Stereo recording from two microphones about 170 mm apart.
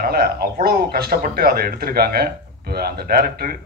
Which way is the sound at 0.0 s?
65° right (ahead or behind).